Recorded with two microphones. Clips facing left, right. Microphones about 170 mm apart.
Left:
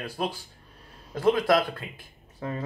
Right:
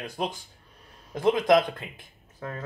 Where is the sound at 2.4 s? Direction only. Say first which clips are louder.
Left 3 dB; 5° left (ahead or behind).